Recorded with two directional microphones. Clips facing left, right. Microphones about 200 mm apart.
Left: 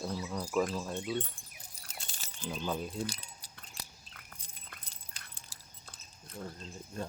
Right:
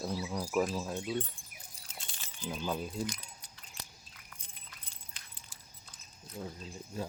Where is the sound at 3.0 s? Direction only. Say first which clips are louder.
Right 1 dB; 35° left (ahead or behind).